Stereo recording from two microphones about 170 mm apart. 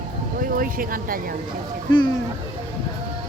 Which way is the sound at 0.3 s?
55° right (ahead or behind).